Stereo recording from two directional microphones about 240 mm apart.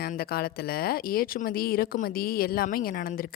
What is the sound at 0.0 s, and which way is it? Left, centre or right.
A woman's voice, left.